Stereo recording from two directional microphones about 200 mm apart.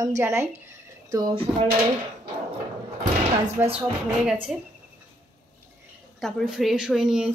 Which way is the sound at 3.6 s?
10° right (ahead or behind).